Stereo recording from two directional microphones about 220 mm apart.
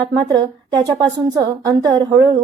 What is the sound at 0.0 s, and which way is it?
A woman's voice, 20° right (ahead or behind).